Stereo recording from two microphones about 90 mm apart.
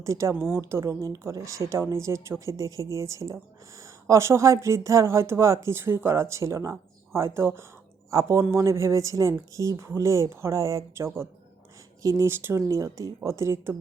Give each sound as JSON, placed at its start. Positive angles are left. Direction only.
{"t": 0.0, "sound": "a woman's voice", "side_deg": -35}